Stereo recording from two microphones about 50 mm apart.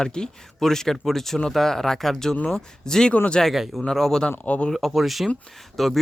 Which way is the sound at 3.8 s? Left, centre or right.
Centre.